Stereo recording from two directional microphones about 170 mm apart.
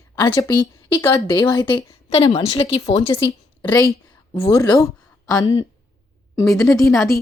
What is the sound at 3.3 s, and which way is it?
A woman's voice, 20° left (ahead or behind).